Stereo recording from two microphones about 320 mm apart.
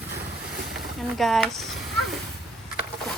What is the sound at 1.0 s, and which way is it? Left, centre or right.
Speech, centre.